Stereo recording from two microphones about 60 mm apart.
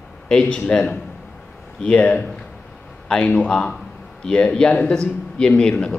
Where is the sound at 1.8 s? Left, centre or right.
Left.